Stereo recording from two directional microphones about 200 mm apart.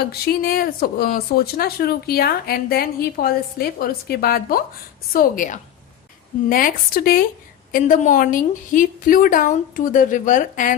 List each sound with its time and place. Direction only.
0.0 s a woman's voice: 50° left (ahead or behind)